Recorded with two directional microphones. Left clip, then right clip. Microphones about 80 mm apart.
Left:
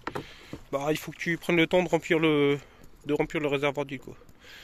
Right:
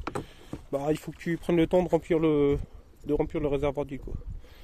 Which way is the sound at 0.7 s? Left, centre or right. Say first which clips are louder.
Even; right.